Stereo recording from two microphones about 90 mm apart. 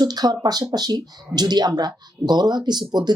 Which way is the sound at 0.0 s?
50° right (ahead or behind).